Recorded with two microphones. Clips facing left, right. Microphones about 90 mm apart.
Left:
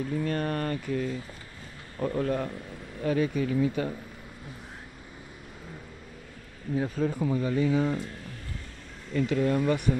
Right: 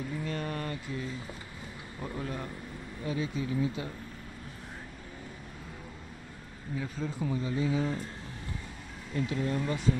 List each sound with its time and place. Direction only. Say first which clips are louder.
0.2 s speech: left 6 dB; 50° left (ahead or behind)
6.8 s speech: left 7 dB; 55° left (ahead or behind)
9.1 s speech: left 6 dB; 70° left (ahead or behind)